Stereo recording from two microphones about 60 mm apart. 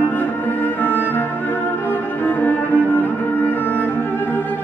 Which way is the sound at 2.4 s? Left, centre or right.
Left.